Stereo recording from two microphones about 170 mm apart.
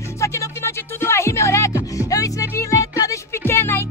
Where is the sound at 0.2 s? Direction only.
15° left (ahead or behind).